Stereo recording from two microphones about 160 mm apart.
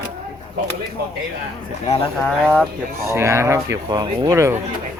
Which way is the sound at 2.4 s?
5° right (ahead or behind).